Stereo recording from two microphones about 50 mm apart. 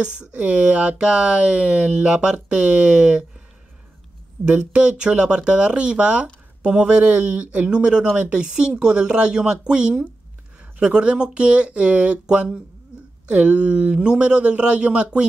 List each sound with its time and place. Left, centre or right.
0.0 s speech: right
4.5 s speech: right